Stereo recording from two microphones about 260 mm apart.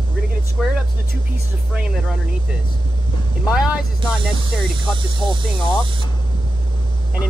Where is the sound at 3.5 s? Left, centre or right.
Centre.